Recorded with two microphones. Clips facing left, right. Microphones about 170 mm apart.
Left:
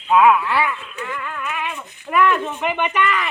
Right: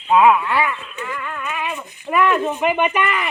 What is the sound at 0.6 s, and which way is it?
Speech, 5° right (ahead or behind).